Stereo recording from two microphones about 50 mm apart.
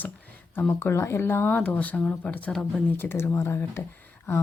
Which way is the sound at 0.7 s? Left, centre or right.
Left.